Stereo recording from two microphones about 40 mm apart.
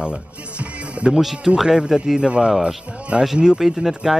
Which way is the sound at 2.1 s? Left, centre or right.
Right.